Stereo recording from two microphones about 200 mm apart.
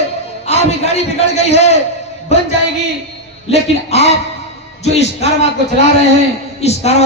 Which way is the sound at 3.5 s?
30° left (ahead or behind).